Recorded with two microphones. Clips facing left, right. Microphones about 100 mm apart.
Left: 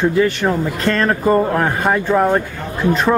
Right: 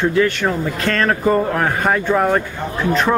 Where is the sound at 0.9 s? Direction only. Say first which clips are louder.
Left 1 dB; 10° left (ahead or behind).